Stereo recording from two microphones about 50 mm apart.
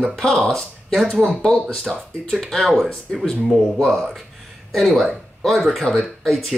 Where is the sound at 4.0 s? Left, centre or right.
Centre.